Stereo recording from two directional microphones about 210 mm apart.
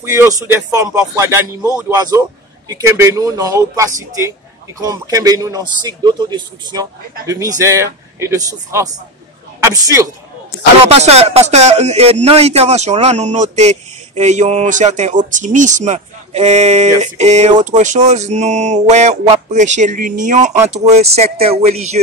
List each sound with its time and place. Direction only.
0.0 s a man's voice: 15° right (ahead or behind)
10.9 s speech: 30° right (ahead or behind)